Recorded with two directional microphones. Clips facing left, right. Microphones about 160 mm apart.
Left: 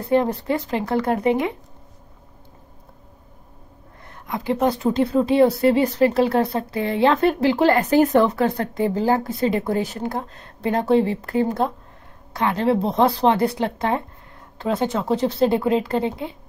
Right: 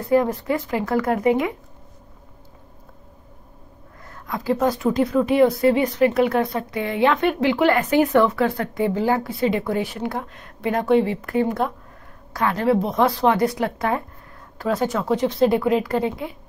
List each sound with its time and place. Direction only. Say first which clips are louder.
0.0 s speech: right 1 dB; 30° left (ahead or behind)
4.0 s a woman's voice: left 1 dB; 25° left (ahead or behind)